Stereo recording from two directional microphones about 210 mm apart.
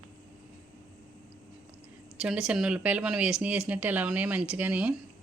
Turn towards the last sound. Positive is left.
turn(degrees=-5)  # may be behind; listen again after turning